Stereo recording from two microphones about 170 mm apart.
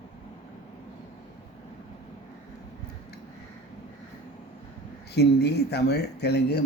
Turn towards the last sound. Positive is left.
turn(degrees=75)  # may be behind; listen again after turning